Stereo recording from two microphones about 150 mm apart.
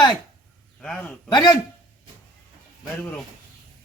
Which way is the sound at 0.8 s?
5° left (ahead or behind).